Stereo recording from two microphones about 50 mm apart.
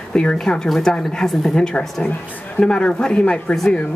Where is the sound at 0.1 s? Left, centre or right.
Centre.